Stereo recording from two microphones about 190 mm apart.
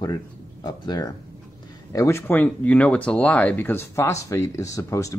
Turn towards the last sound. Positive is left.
turn(degrees=15)  # may be behind; listen again after turning